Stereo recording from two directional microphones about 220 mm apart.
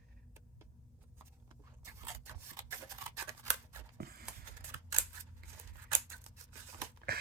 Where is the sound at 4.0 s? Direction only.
45° right (ahead or behind).